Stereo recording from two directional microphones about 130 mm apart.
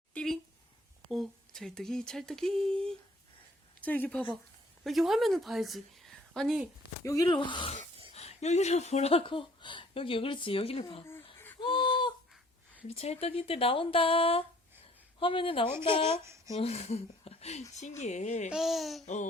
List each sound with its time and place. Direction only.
0.1 s a sound: 5° left (ahead or behind)
1.1 s speech: centre (ahead or behind)
4.8 s a woman's voice: centre (ahead or behind)
7.0 s speech: 25° left (ahead or behind)
7.3 s speech: 40° left (ahead or behind)
8.1 s speech: 55° left (ahead or behind)
11.0 s a sound: 20° left (ahead or behind)
11.6 s a sound: 40° left (ahead or behind)
12.9 s speech: 50° left (ahead or behind)
16.6 s speech: 50° left (ahead or behind)
18.5 s speech: centre (ahead or behind)
19.0 s speech: 65° left (ahead or behind)